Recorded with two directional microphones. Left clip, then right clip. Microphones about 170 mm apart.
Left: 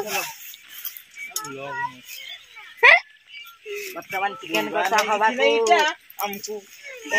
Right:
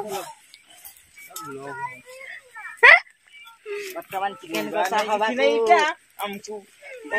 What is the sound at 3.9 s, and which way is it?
Speech, 60° left (ahead or behind).